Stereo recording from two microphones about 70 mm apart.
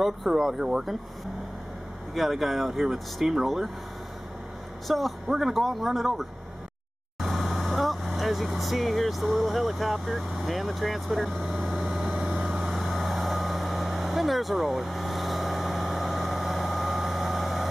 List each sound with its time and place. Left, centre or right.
0.0 s speech: centre
2.1 s speech: centre
4.8 s speech: centre
7.2 s vehicle: centre